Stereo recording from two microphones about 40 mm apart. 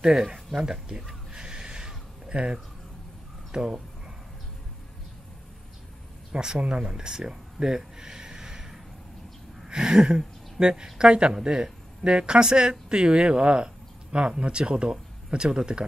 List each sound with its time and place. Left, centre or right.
0.0 s speech: centre
1.3 s a sound: right
3.5 s speech: right
6.3 s speech: right